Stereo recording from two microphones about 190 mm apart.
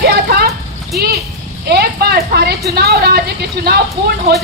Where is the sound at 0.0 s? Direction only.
55° right (ahead or behind).